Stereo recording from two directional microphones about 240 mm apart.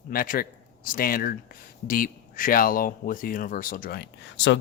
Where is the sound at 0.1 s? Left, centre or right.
Left.